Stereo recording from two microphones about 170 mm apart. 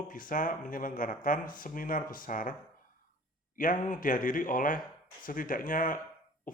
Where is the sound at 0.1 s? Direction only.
55° left (ahead or behind).